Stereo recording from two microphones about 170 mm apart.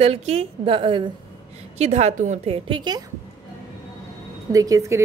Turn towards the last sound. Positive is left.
turn(degrees=-15)  # may be behind; listen again after turning